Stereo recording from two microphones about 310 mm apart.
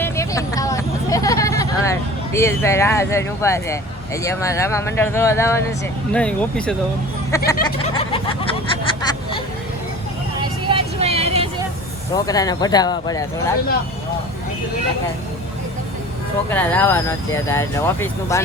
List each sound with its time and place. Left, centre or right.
0.0 s vehicle: centre
6.1 s speech: centre
7.3 s a sound: centre
10.7 s vehicle: centre
12.1 s speech: centre
16.5 s speech: centre